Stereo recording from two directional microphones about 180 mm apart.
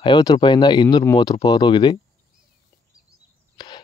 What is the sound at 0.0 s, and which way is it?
Speech, 25° left (ahead or behind).